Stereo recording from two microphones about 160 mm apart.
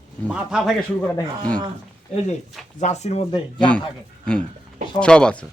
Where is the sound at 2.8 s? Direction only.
45° left (ahead or behind).